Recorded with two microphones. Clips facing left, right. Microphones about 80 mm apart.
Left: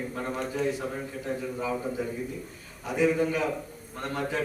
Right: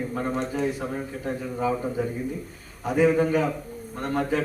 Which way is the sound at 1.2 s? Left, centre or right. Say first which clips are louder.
Right 4 dB; right.